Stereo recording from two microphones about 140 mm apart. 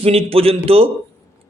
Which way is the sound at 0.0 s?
45° right (ahead or behind).